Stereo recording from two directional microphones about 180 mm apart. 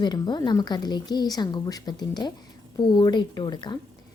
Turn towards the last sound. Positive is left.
turn(degrees=25)  # may be behind; listen again after turning